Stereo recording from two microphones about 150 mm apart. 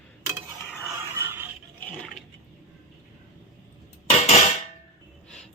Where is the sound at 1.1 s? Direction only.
15° right (ahead or behind).